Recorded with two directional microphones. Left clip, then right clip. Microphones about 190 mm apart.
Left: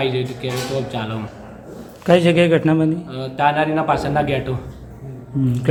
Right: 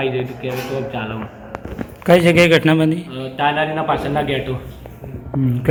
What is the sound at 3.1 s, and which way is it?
A man's voice, 25° left (ahead or behind).